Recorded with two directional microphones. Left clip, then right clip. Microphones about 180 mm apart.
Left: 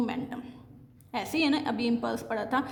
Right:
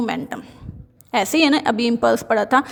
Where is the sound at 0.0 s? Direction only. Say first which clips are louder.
Right 9 dB; 45° right (ahead or behind).